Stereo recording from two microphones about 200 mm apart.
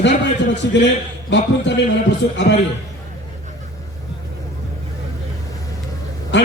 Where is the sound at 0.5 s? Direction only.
65° left (ahead or behind).